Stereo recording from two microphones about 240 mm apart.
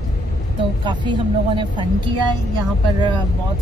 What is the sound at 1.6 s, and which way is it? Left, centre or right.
Speech, centre.